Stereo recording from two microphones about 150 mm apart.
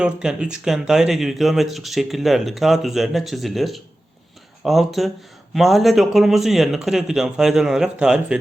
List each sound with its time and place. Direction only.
0.0 s speech: 5° right (ahead or behind)